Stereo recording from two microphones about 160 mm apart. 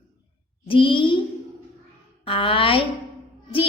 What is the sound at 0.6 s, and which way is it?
Speech, 30° left (ahead or behind).